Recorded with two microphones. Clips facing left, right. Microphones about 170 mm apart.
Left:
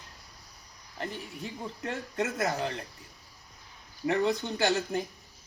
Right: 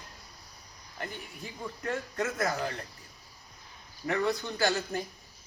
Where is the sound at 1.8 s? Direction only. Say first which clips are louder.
Even; 25° left (ahead or behind).